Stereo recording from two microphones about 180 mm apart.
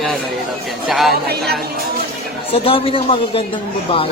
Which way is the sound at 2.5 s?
30° left (ahead or behind).